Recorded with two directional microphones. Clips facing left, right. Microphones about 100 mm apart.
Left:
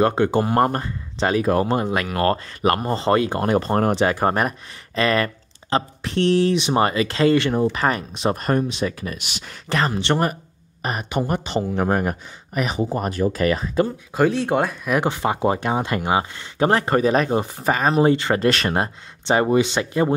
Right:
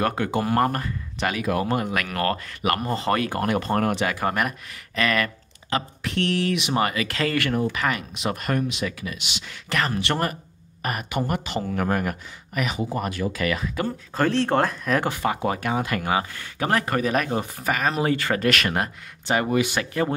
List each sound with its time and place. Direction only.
0.0 s speech: 25° left (ahead or behind); by 9.6 s 45° left (ahead or behind)
9.7 s speech: 30° left (ahead or behind)
13.8 s speech: 10° left (ahead or behind)
15.0 s speech: 25° left (ahead or behind)